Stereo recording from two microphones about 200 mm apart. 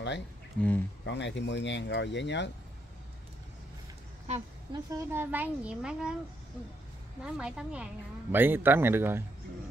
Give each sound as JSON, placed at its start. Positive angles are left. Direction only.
{"t": 0.6, "sound": "speech", "side_deg": 10}
{"t": 1.0, "sound": "speech", "side_deg": 60}
{"t": 4.7, "sound": "a woman's voice", "side_deg": -15}
{"t": 7.2, "sound": "a woman's voice", "side_deg": -5}